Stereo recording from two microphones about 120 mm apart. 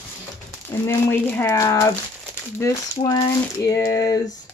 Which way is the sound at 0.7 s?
20° left (ahead or behind).